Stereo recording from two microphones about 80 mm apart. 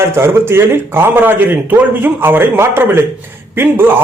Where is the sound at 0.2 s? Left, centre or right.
Right.